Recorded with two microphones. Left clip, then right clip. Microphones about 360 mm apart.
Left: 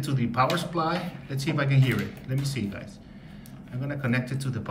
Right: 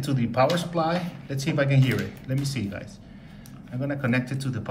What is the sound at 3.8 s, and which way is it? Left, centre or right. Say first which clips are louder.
Speech: right 3 dB; centre.